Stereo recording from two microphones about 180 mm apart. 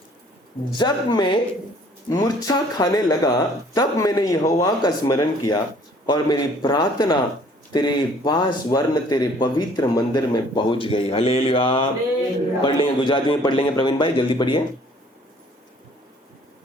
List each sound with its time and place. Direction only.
0.8 s speech: 25° left (ahead or behind)